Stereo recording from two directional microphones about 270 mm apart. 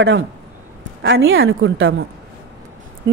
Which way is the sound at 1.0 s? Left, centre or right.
Right.